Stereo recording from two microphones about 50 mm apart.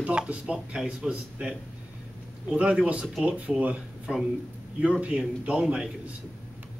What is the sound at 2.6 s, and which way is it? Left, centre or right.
Speech, right.